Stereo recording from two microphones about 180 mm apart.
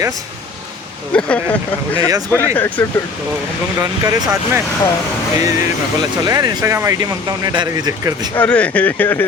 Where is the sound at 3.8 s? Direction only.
20° right (ahead or behind).